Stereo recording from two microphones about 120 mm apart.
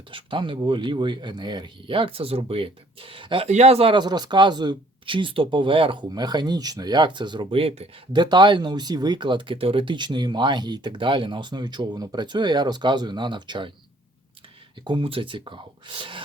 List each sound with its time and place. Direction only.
0.1 s speech: 45° right (ahead or behind)
3.5 s speech: 60° right (ahead or behind)
3.9 s speech: 35° right (ahead or behind)
6.1 s speech: 35° right (ahead or behind); by 8.2 s 50° right (ahead or behind)
8.2 s speech: 40° right (ahead or behind)
14.8 s speech: 45° right (ahead or behind)